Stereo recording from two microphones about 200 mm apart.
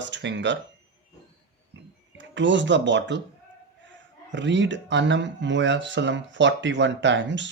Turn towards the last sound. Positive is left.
turn(degrees=-65)  # may be behind; listen again after turning